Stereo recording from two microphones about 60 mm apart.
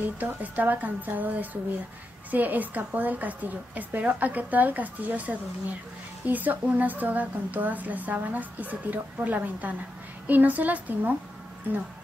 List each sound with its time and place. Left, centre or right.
0.0 s speech: right